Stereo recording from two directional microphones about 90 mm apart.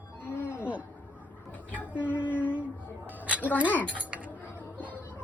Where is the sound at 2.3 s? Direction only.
20° left (ahead or behind).